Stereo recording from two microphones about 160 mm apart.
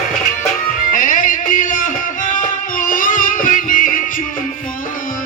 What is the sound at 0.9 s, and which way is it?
Music, 55° left (ahead or behind).